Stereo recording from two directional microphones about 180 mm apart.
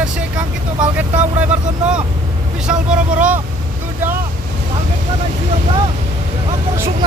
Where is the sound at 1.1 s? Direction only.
45° right (ahead or behind).